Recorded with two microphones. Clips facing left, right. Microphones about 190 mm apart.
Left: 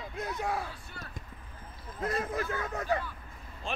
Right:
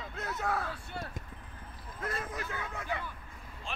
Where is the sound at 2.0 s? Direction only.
35° left (ahead or behind).